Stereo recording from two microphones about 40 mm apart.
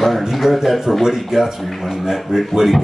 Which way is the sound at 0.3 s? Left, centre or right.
Centre.